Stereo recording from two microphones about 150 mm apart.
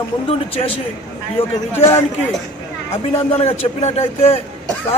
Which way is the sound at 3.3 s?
45° left (ahead or behind).